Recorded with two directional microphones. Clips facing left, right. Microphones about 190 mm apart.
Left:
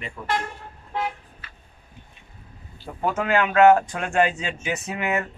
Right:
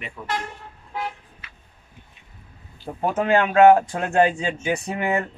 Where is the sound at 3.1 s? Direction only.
35° right (ahead or behind).